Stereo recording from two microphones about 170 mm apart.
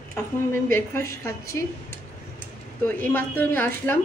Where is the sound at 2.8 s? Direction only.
10° left (ahead or behind).